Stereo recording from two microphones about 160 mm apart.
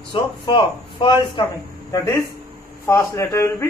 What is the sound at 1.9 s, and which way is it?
Speech, 20° left (ahead or behind).